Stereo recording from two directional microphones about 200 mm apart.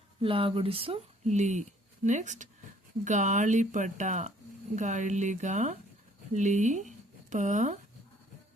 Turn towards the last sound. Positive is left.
turn(degrees=-35)  # may be behind; listen again after turning